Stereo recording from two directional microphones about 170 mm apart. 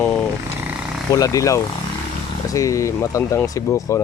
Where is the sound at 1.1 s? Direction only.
20° left (ahead or behind).